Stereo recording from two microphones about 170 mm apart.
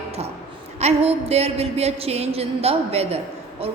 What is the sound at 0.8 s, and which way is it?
A woman's voice, 40° right (ahead or behind).